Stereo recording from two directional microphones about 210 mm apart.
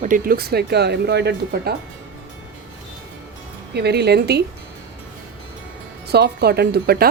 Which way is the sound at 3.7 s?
50° right (ahead or behind).